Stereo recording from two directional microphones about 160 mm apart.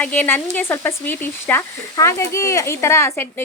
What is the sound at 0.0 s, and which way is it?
Speech, 10° left (ahead or behind).